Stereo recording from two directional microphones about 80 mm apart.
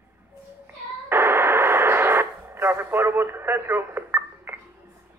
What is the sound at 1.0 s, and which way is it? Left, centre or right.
Radio, right.